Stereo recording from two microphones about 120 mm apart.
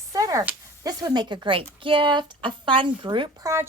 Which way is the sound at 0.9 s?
35° right (ahead or behind).